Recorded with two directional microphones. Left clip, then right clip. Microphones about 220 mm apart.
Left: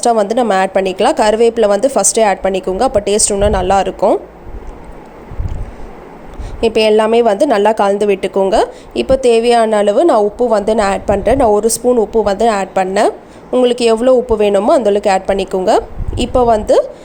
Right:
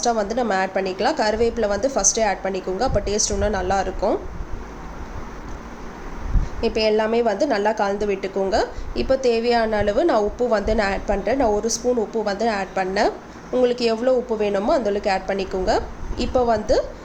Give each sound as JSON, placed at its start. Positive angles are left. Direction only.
{"t": 0.0, "sound": "a woman's voice", "side_deg": 35}
{"t": 6.6, "sound": "a woman's voice", "side_deg": 35}